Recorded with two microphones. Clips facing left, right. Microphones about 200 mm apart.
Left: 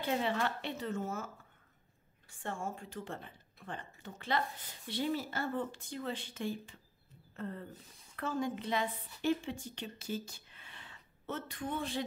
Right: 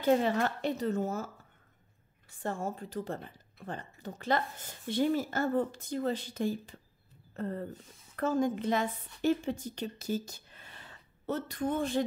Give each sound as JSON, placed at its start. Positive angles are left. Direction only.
{"t": 0.0, "sound": "speech", "side_deg": -40}
{"t": 2.4, "sound": "a woman's voice", "side_deg": -40}